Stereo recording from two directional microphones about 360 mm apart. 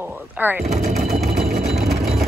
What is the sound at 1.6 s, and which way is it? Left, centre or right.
Vehicle, centre.